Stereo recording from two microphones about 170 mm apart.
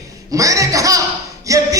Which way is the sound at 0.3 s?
20° right (ahead or behind).